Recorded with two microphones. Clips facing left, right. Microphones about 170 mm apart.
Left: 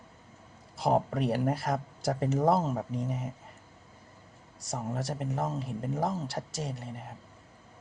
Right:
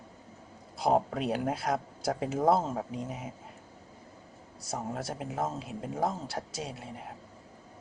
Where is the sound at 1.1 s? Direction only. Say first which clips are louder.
Left 2 dB; centre (ahead or behind).